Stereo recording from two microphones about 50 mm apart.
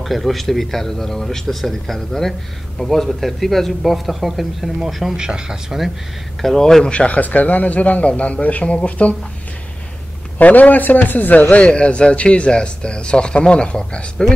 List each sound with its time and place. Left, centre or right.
0.0 s a man's voice: centre
6.4 s speech: centre
6.9 s speech: left
10.4 s a man's voice: left
11.5 s speech: left